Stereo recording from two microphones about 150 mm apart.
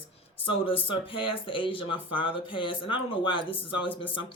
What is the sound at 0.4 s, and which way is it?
Speech, 35° left (ahead or behind).